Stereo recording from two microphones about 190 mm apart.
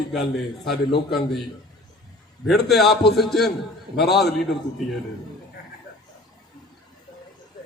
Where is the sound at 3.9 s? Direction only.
60° left (ahead or behind).